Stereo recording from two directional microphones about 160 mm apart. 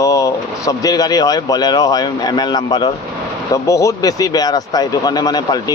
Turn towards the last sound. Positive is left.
turn(degrees=25)  # may be behind; listen again after turning